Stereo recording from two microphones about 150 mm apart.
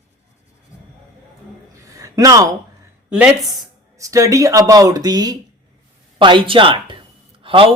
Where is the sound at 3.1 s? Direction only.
5° right (ahead or behind).